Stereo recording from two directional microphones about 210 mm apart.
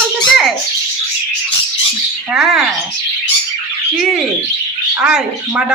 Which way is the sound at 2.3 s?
Centre (ahead or behind).